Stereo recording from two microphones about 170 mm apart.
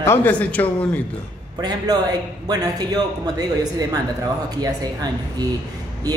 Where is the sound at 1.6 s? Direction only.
25° right (ahead or behind).